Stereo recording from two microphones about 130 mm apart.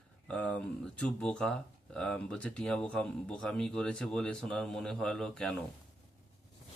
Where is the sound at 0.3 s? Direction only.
10° left (ahead or behind).